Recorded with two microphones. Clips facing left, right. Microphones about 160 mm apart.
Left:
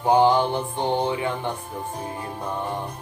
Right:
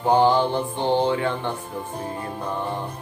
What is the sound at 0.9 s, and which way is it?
Music, 25° right (ahead or behind).